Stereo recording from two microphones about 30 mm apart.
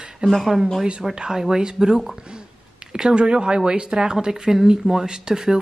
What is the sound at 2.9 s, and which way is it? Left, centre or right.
A woman's voice, right.